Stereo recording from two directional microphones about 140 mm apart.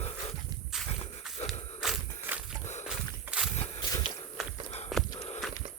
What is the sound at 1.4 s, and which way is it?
Walk, centre (ahead or behind).